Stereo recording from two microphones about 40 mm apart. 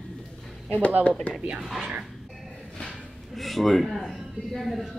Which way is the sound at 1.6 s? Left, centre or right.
Centre.